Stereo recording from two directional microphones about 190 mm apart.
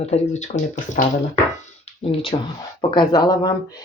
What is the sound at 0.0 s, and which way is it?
Speech, 35° left (ahead or behind).